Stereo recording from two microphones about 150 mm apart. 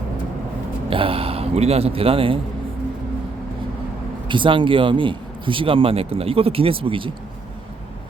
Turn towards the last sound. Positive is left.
turn(degrees=-35)  # may be behind; listen again after turning